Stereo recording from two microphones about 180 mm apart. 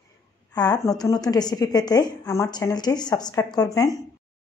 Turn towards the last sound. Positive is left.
turn(degrees=20)  # may be behind; listen again after turning